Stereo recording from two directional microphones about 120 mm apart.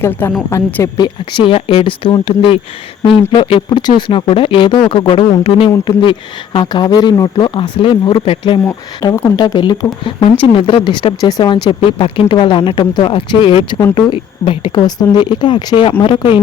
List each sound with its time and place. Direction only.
0.0 s a woman's voice: 20° left (ahead or behind)
0.9 s speech: 40° left (ahead or behind)
7.5 s speech: 45° left (ahead or behind)
8.2 s speech: 55° left (ahead or behind)
9.3 s speech: 35° left (ahead or behind)
10.2 s speech: 50° left (ahead or behind)
11.2 s speech: 30° left (ahead or behind)